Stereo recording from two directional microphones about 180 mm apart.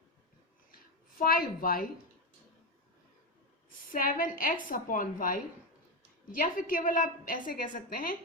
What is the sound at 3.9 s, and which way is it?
A woman's voice, 50° left (ahead or behind).